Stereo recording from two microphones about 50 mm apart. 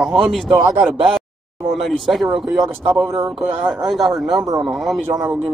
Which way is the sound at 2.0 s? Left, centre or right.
Centre.